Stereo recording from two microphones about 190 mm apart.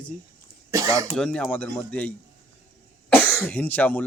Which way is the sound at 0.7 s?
15° right (ahead or behind).